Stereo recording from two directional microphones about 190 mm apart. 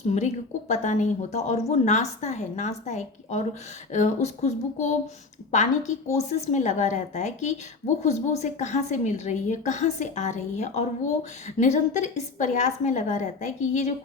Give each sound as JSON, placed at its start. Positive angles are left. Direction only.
{"t": 0.1, "sound": "a woman's voice", "side_deg": 35}